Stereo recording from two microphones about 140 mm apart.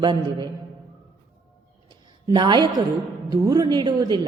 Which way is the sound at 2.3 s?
30° right (ahead or behind).